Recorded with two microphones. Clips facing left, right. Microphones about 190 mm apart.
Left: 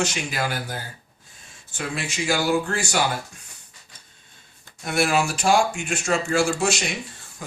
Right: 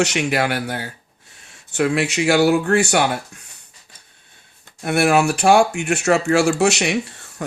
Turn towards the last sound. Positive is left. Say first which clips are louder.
# right 9 dB
turn(degrees=-70)  # may be behind; listen again after turning